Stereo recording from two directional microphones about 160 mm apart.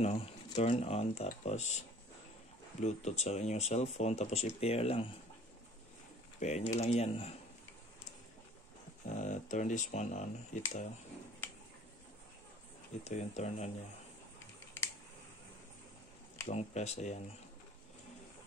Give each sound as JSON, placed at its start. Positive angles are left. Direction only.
{"t": 0.0, "sound": "speech", "side_deg": 45}
{"t": 6.4, "sound": "speech", "side_deg": 45}
{"t": 9.0, "sound": "speech", "side_deg": 50}
{"t": 13.0, "sound": "speech", "side_deg": 45}
{"t": 16.4, "sound": "speech", "side_deg": 45}